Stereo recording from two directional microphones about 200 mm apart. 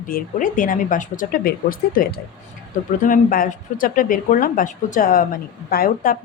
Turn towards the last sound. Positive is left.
turn(degrees=45)  # may be behind; listen again after turning